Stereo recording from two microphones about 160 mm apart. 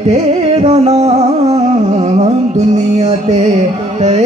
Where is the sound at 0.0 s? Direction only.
40° right (ahead or behind).